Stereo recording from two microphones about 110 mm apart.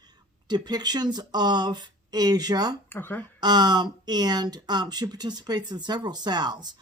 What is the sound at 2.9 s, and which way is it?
Speech, 20° left (ahead or behind).